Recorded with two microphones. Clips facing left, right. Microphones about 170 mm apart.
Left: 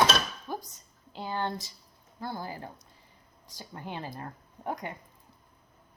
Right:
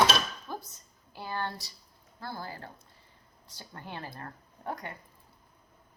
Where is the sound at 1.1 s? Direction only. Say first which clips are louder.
Left 3 dB; 20° left (ahead or behind).